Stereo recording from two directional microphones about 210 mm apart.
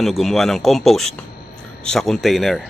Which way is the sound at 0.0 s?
Centre (ahead or behind).